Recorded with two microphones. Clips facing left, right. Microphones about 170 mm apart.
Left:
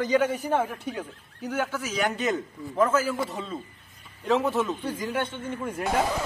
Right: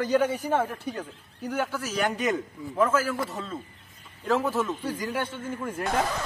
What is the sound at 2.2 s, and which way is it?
Speech, 10° right (ahead or behind).